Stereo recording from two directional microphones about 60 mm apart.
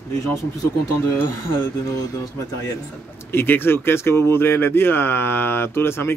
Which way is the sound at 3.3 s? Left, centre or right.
Left.